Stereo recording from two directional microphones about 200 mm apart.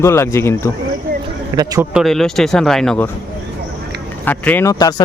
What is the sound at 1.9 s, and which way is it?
Speech, centre (ahead or behind).